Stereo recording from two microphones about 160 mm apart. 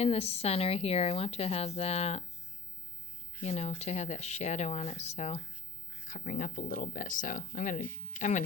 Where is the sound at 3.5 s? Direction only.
40° left (ahead or behind).